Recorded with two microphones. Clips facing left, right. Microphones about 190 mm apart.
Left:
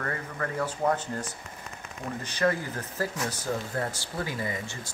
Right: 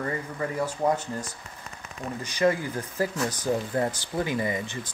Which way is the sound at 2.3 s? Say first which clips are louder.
Right 3 dB; 15° right (ahead or behind).